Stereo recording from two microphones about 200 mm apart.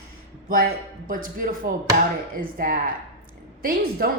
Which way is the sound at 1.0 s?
45° right (ahead or behind).